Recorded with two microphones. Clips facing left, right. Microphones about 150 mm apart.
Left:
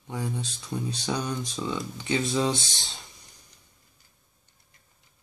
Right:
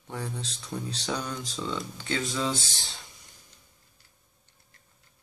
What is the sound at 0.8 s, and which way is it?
Speech, 10° left (ahead or behind).